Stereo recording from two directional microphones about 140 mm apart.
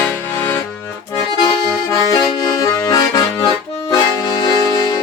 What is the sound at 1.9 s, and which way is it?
Accordion, 25° left (ahead or behind).